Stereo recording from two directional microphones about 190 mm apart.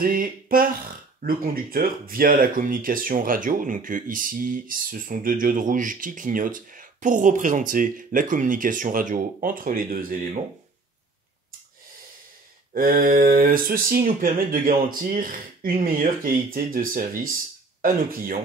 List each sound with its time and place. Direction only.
0.0 s speech: 50° right (ahead or behind)
12.7 s speech: 45° right (ahead or behind)